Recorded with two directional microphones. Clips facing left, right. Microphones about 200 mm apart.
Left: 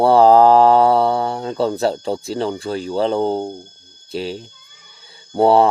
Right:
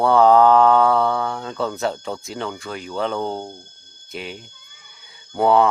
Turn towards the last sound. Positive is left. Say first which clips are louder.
# left 3 dB
turn(degrees=35)  # may be behind; listen again after turning